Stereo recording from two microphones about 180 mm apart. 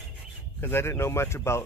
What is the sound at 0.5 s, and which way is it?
Speech, 10° left (ahead or behind).